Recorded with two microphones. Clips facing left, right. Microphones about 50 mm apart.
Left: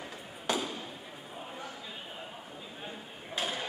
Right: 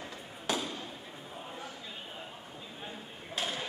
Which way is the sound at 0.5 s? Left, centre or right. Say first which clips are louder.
Left 1 dB; centre.